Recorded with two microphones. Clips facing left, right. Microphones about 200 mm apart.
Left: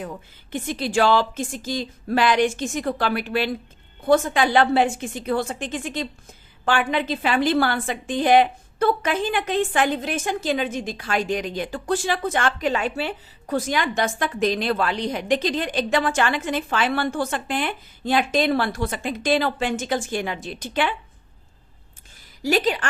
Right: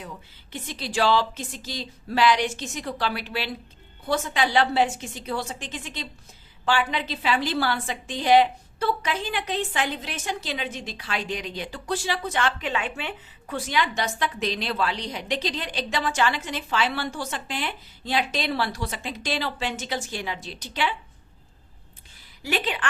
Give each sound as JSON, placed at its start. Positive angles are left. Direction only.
{"t": 0.5, "sound": "a woman's voice", "side_deg": 50}
{"t": 22.4, "sound": "a woman's voice", "side_deg": 40}